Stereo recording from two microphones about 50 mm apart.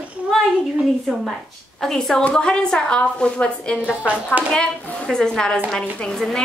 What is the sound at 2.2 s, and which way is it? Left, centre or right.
A woman's voice, left.